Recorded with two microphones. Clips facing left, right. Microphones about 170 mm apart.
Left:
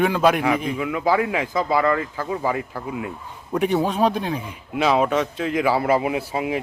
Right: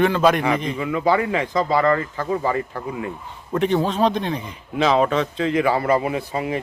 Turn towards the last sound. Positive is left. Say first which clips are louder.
# even
turn(degrees=5)  # may be behind; listen again after turning